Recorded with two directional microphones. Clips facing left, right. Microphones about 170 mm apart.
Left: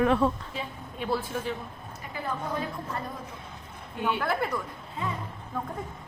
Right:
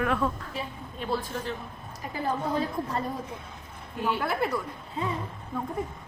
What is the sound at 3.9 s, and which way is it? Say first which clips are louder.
Speech: even; 5° right (ahead or behind).